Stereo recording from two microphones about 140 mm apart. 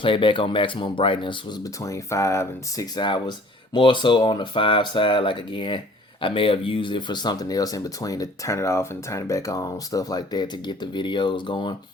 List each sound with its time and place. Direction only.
0.0 s speech: 35° left (ahead or behind)